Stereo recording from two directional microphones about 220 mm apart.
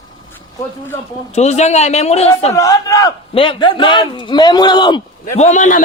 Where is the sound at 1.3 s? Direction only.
30° left (ahead or behind).